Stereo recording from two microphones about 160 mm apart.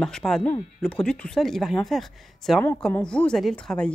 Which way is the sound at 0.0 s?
5° left (ahead or behind).